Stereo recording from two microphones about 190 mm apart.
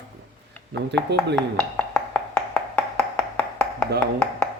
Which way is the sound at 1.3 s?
5° left (ahead or behind).